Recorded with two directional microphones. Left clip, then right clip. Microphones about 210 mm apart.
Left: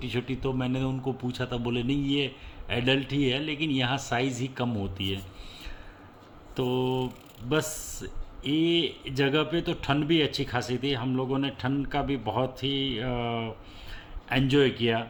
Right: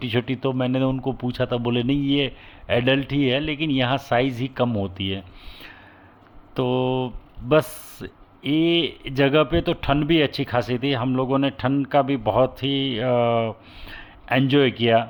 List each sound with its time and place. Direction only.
0.0 s speech: 45° right (ahead or behind)